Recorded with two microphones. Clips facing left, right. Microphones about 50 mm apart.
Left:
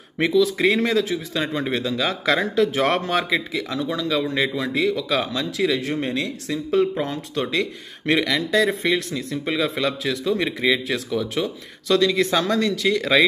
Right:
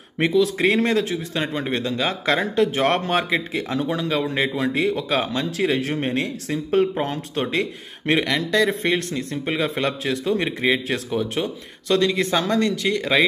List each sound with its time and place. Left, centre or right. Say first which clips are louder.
0.2 s a man's voice: even; right
1.4 s a man's voice: even; centre
3.5 s speech: right 1 dB; right
4.2 s speech: right 1 dB; right
8.1 s speech: even; centre
8.4 s speech: even; centre
8.8 s a man's voice: even; right
12.2 s speech: even; centre